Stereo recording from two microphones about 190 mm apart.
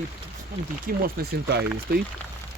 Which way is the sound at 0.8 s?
55° right (ahead or behind).